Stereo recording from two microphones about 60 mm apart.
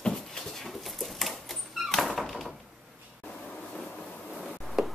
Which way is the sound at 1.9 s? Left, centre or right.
Centre.